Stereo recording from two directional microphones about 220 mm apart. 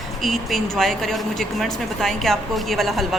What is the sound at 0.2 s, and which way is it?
A woman's voice, centre (ahead or behind).